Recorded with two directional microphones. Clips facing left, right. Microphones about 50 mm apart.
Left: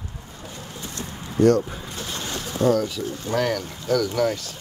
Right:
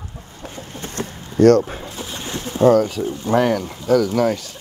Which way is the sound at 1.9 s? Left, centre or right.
Centre.